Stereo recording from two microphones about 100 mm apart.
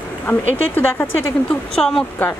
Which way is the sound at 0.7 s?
20° left (ahead or behind).